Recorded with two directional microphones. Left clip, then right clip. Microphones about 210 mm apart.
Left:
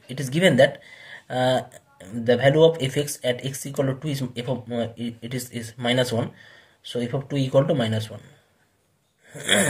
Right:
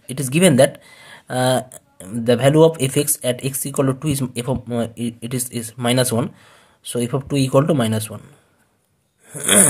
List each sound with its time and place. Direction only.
0.1 s speech: 40° right (ahead or behind)
1.1 s a sound: 40° right (ahead or behind)
2.0 s speech: 40° right (ahead or behind)
9.3 s speech: 40° right (ahead or behind)